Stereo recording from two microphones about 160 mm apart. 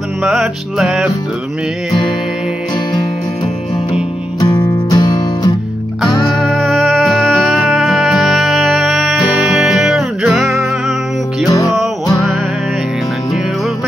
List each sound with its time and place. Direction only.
0.2 s music: centre (ahead or behind)
4.4 s music: 25° left (ahead or behind)
6.4 s music: centre (ahead or behind)
11.4 s music: 20° left (ahead or behind)